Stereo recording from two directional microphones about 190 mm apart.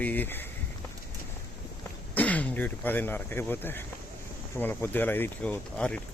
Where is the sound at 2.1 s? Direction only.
10° left (ahead or behind).